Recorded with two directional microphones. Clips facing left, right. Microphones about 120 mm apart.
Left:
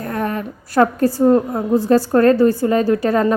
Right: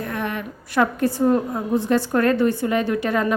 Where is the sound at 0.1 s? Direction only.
40° left (ahead or behind).